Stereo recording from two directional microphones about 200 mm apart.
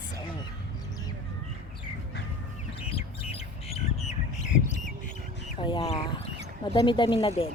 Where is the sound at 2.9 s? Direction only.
30° left (ahead or behind).